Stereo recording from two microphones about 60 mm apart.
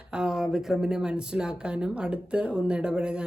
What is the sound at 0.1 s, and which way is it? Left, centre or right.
Speech, centre.